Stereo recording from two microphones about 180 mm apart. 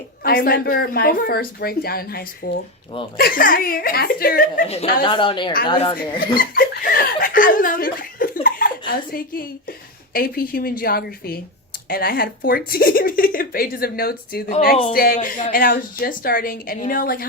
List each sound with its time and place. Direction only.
0.2 s a woman's voice: 55° left (ahead or behind)
5.0 s a woman's voice: 30° left (ahead or behind)
6.1 s chuckle: 55° left (ahead or behind)
8.9 s a woman's voice: 55° left (ahead or behind)